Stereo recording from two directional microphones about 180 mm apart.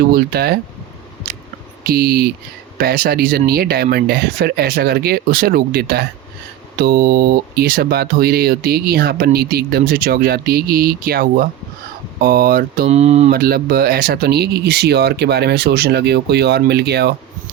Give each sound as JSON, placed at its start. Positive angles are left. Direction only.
{"t": 0.0, "sound": "speech", "side_deg": -55}
{"t": 1.8, "sound": "speech", "side_deg": -55}
{"t": 12.9, "sound": "speech", "side_deg": -35}
{"t": 13.3, "sound": "speech", "side_deg": -55}